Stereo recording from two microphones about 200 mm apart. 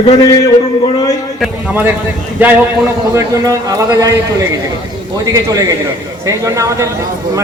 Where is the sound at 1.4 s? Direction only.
10° right (ahead or behind).